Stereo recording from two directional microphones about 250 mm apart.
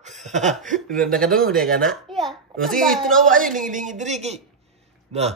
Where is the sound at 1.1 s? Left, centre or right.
Right.